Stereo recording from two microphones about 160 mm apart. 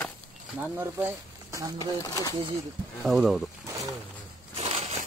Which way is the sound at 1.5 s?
20° right (ahead or behind).